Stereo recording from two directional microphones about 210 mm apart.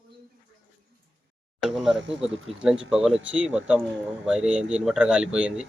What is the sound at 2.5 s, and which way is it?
Speech, 5° right (ahead or behind).